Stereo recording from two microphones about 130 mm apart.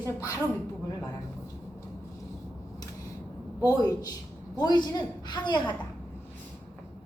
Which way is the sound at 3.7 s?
30° left (ahead or behind).